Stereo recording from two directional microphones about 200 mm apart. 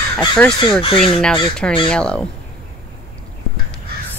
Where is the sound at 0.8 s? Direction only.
25° left (ahead or behind).